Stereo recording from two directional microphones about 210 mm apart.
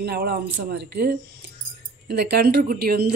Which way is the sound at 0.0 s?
50° right (ahead or behind).